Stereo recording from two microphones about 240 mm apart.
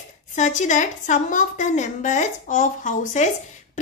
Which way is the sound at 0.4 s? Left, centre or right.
Left.